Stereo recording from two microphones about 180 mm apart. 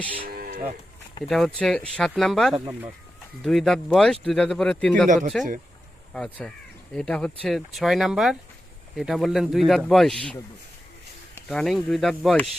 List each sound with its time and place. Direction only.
0.3 s moo: 55° right (ahead or behind)
1.3 s speech: 5° left (ahead or behind)
5.0 s speech: 45° right (ahead or behind)
6.1 s speech: 5° left (ahead or behind)
11.3 s speech: 5° left (ahead or behind)